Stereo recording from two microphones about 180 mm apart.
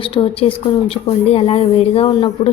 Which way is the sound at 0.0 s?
30° left (ahead or behind).